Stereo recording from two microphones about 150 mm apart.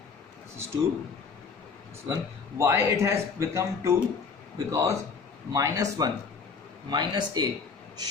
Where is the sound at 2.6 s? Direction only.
20° right (ahead or behind).